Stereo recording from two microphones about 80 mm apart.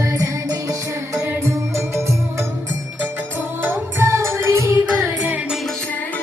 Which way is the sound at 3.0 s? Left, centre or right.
Right.